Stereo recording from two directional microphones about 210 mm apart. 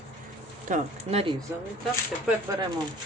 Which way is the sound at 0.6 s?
35° right (ahead or behind).